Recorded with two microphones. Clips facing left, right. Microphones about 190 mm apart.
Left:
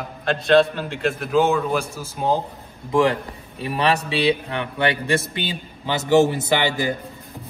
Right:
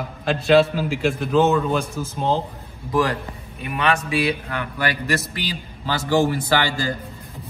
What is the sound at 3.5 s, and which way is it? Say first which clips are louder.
A man's voice: left 1 dB; 30° left (ahead or behind).